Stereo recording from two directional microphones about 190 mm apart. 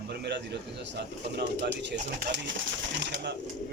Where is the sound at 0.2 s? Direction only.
65° right (ahead or behind).